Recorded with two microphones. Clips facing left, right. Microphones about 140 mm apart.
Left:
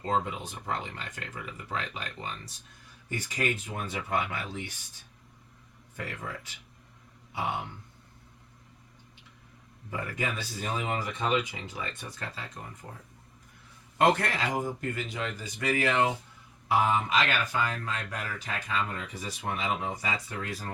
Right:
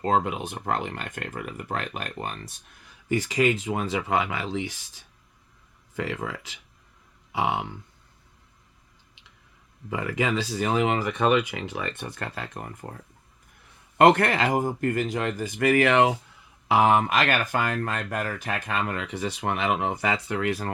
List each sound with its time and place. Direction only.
0.0 s speech: 70° right (ahead or behind)
3.1 s speech: 90° right
9.9 s speech: 90° right; by 12.9 s 55° right (ahead or behind)
14.0 s speech: 60° right (ahead or behind)
16.6 s speech: 85° right